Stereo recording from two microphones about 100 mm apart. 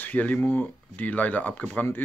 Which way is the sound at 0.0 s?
15° left (ahead or behind).